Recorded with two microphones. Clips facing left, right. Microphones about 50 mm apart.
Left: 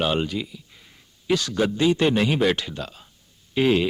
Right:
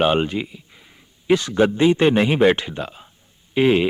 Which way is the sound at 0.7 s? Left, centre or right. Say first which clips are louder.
Right 2 dB; centre.